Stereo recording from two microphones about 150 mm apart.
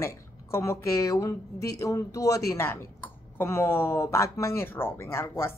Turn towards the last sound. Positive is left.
turn(degrees=15)  # may be behind; listen again after turning